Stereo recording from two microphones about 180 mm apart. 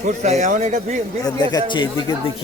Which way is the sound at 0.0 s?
40° right (ahead or behind).